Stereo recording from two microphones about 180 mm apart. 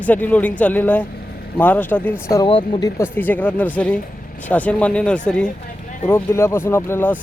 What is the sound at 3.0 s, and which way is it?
Speech, 10° left (ahead or behind).